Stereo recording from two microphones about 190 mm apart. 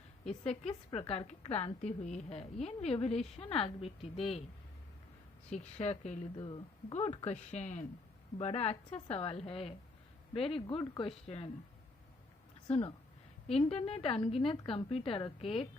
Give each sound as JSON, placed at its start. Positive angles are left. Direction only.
{"t": 0.3, "sound": "a woman's voice", "side_deg": 35}
{"t": 5.5, "sound": "a woman's voice", "side_deg": 35}
{"t": 6.3, "sound": "a woman's voice", "side_deg": 25}
{"t": 13.5, "sound": "a woman's voice", "side_deg": 30}